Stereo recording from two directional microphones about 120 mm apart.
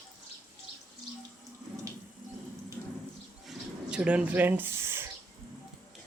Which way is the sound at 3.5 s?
10° right (ahead or behind).